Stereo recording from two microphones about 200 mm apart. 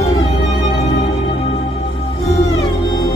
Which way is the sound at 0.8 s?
25° left (ahead or behind).